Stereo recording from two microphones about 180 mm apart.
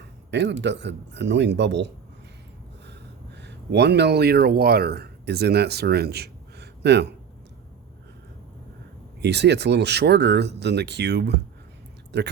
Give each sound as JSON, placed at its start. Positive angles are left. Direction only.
{"t": 0.3, "sound": "speech", "side_deg": -75}
{"t": 3.3, "sound": "speech", "side_deg": -70}
{"t": 9.2, "sound": "speech", "side_deg": -70}